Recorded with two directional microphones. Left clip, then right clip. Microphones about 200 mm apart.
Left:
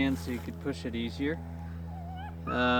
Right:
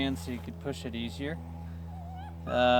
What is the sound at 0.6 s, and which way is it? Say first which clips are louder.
Speech: left 1 dB; 50° right (ahead or behind).